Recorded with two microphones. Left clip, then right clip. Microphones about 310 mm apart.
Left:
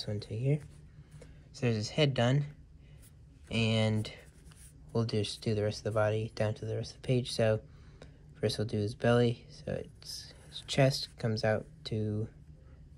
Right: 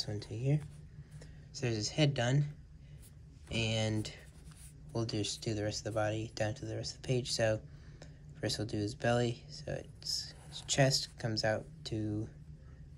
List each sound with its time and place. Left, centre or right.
0.0 s speech: centre
12.0 s speech: left